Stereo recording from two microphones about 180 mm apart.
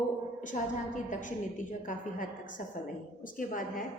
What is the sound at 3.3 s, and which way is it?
Speech, 50° left (ahead or behind).